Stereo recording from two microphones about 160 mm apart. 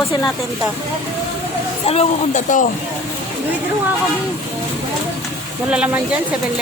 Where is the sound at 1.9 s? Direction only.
40° left (ahead or behind).